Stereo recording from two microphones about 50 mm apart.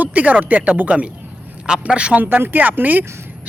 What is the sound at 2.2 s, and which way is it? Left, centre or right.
Speech, right.